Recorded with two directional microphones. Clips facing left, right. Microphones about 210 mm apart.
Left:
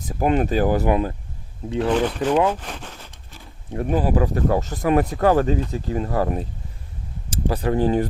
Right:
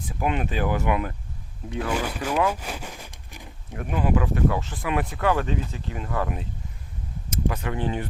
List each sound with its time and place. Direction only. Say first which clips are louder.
0.0 s speech: left 6 dB; 40° left (ahead or behind)
1.9 s speech: left 8 dB; 10° right (ahead or behind)
2.5 s a sound: left 3 dB; 10° right (ahead or behind)
3.7 s speech: left 4 dB; 35° left (ahead or behind)